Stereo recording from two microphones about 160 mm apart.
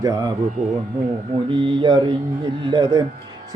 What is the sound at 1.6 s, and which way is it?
Speech, 30° right (ahead or behind).